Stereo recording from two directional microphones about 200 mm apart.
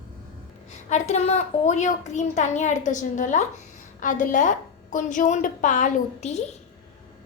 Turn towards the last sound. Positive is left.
turn(degrees=35)  # may be behind; listen again after turning